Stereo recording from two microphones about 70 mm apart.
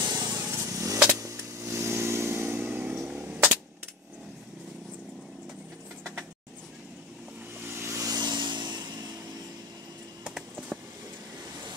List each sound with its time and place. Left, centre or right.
0.0 s vehicle: right
0.3 s vehicle: right
3.1 s a sound: centre
7.6 s vehicle: right
8.0 s vehicle: right